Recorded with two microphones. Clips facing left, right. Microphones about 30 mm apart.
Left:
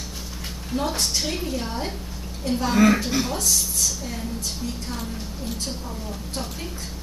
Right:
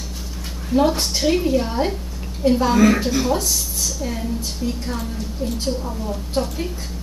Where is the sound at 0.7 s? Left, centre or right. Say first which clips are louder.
Right 7 dB; centre.